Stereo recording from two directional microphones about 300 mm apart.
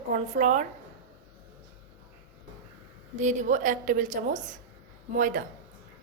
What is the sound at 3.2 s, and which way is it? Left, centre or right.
A woman's voice, right.